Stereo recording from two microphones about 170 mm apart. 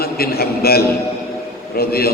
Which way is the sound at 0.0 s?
65° left (ahead or behind).